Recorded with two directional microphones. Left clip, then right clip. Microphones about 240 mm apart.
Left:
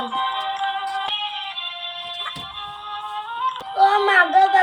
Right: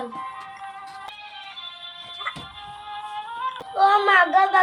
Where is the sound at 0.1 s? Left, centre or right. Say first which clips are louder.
Left 11 dB; left.